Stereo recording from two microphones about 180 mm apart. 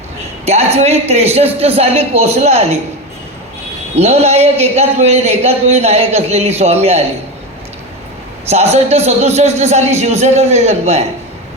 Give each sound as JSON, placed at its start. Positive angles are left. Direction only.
{"t": 0.4, "sound": "a man's voice", "side_deg": -35}
{"t": 3.9, "sound": "a man's voice", "side_deg": -35}
{"t": 8.4, "sound": "a man's voice", "side_deg": -35}